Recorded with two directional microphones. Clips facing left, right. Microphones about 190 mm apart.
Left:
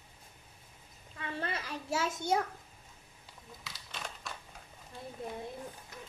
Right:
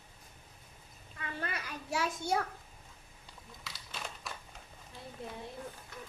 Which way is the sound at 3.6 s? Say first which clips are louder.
Even; centre (ahead or behind).